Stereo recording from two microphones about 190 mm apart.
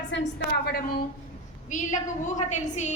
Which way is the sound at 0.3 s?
55° left (ahead or behind).